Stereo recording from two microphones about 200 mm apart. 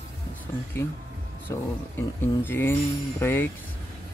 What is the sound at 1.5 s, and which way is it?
Speech, 15° left (ahead or behind).